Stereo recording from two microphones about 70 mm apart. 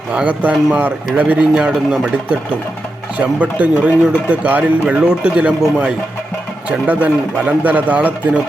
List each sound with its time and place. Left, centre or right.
0.1 s a man's voice: centre
1.5 s a man's voice: centre; by 8.1 s right